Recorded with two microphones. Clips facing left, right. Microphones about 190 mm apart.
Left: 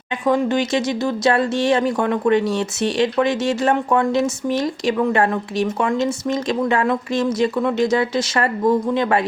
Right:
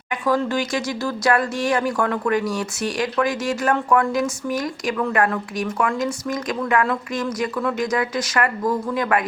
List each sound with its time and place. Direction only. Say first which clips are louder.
0.3 s speech: left 3 dB; 20° left (ahead or behind)